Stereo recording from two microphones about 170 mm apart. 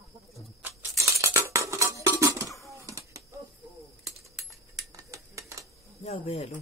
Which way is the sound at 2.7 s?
20° right (ahead or behind).